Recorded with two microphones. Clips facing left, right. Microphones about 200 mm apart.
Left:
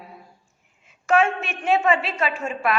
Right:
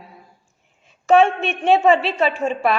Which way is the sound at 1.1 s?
30° right (ahead or behind).